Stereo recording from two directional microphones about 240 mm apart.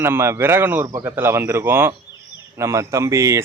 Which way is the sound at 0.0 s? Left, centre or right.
Centre.